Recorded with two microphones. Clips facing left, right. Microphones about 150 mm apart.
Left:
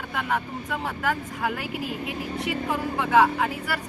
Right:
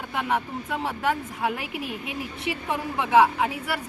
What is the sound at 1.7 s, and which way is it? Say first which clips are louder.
Speech: left 2 dB; 25° left (ahead or behind).